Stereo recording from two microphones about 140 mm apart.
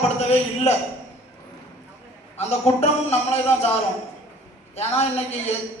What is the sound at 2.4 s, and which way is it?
A man's voice, 50° left (ahead or behind).